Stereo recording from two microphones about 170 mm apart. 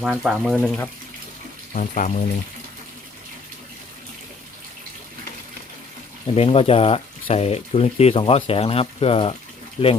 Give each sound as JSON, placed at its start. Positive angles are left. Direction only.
{"t": 0.0, "sound": "speech", "side_deg": 0}
{"t": 1.7, "sound": "speech", "side_deg": 45}
{"t": 6.3, "sound": "speech", "side_deg": 35}